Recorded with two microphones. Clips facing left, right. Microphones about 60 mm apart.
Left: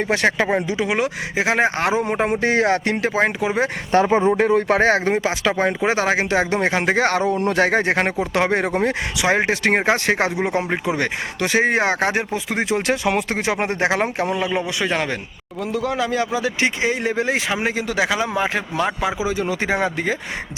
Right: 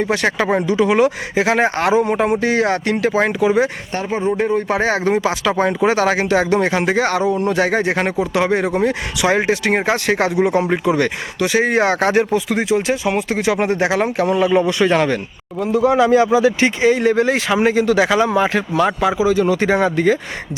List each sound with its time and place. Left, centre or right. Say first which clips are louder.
0.0 s speech: right 1 dB; left
0.8 s speech: right 7 dB; centre; by 3.7 s left
4.1 s speech: left 2 dB; left
4.4 s speech: left 1 dB; left
4.8 s speech: right 1 dB; left
11.3 s speech: right 3 dB; left; by 12.4 s centre
12.6 s speech: right 3 dB; left
13.3 s speech: right 4 dB; left; by 14.6 s centre
14.7 s speech: right 7 dB; centre
15.5 s speech: right 8 dB; centre
16.6 s speech: right 6 dB; centre